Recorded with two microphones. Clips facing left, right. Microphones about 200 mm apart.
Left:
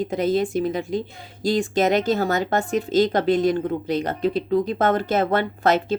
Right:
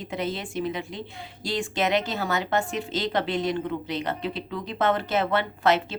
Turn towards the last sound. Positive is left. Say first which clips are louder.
# left 3 dB
turn(degrees=45)  # may be behind; listen again after turning